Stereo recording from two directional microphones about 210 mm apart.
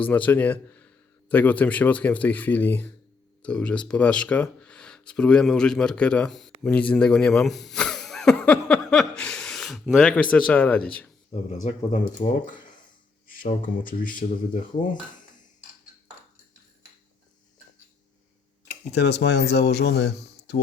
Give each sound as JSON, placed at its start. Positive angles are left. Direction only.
{"t": 0.0, "sound": "speech", "side_deg": 10}
{"t": 11.9, "sound": "speech", "side_deg": 35}
{"t": 18.9, "sound": "speech", "side_deg": 55}